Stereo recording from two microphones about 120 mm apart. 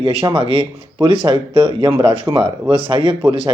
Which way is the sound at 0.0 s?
50° right (ahead or behind).